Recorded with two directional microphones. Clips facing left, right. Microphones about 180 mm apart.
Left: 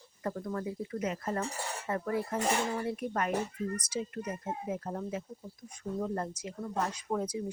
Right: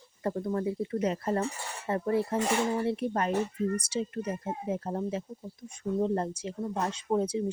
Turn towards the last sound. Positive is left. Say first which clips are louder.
# right 5 dB
turn(degrees=-25)  # may be behind; listen again after turning